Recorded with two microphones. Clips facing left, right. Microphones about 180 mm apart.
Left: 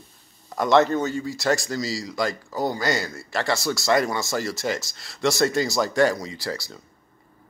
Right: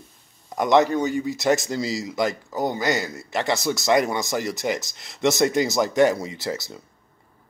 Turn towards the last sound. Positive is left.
turn(degrees=-20)  # may be behind; listen again after turning